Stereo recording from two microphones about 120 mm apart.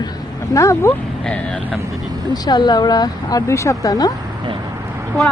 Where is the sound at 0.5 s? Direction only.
25° left (ahead or behind).